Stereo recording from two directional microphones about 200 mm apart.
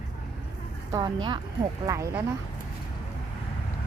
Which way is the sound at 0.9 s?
20° right (ahead or behind).